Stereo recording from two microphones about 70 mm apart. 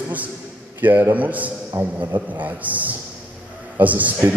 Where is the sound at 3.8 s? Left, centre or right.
Right.